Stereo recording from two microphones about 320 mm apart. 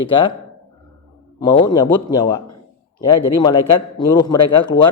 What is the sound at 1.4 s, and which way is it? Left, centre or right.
Speech, centre.